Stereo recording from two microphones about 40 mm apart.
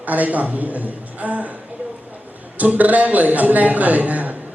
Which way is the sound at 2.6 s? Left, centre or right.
Right.